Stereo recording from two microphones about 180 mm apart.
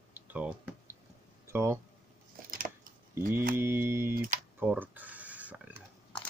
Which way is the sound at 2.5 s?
50° right (ahead or behind).